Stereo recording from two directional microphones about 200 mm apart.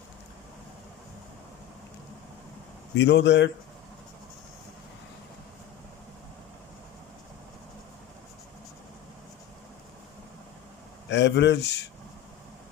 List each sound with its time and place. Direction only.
3.0 s speech: 60° left (ahead or behind)
11.1 s speech: 60° left (ahead or behind)